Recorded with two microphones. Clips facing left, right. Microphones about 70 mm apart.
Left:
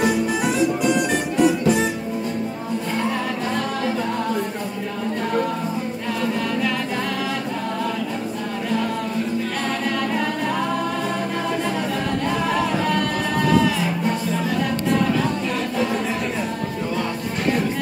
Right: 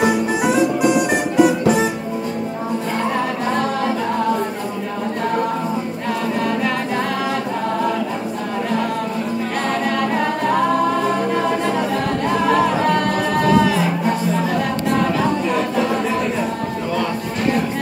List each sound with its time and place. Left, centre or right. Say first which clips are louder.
0.0 s music: right 3 dB; centre
12.4 s music: right 7 dB; centre